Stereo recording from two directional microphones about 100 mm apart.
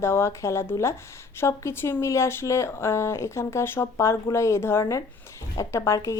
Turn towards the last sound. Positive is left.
turn(degrees=30)  # may be behind; listen again after turning